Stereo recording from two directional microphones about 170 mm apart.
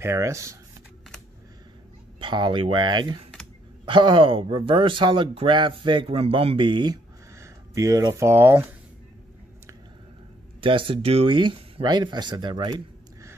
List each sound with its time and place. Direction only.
0.0 s speech: 15° right (ahead or behind)
2.1 s speech: 30° right (ahead or behind)
10.6 s speech: 30° right (ahead or behind)